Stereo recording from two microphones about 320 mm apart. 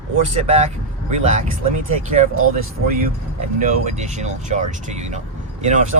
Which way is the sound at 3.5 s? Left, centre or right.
Right.